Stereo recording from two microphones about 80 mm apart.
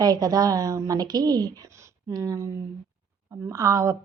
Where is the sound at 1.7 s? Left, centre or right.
Right.